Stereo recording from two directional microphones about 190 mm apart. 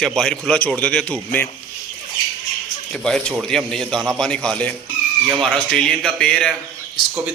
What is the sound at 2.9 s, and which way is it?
A man's voice, 5° left (ahead or behind).